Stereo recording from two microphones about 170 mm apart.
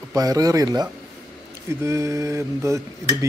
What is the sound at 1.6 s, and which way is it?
Stir, 15° right (ahead or behind).